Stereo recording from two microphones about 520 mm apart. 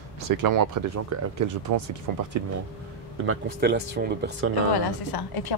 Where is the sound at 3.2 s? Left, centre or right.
Right.